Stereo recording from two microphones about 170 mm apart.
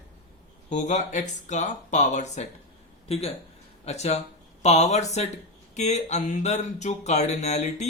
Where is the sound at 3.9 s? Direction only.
40° left (ahead or behind).